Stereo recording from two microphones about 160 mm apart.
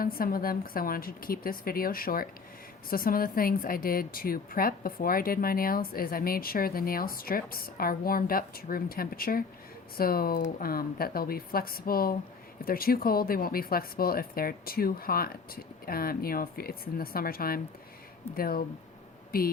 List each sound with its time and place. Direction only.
0.0 s a woman's voice: 65° left (ahead or behind)